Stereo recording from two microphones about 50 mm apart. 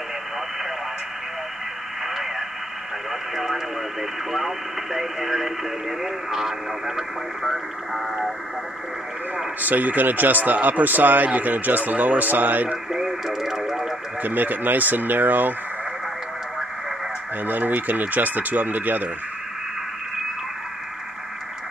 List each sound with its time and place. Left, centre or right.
3.1 s radio: centre
4.3 s speech: centre
9.6 s speech: right
12.9 s speech: centre
14.2 s speech: right
17.5 s speech: right